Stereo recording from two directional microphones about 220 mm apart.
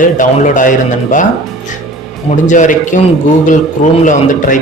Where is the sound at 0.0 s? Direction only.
35° left (ahead or behind).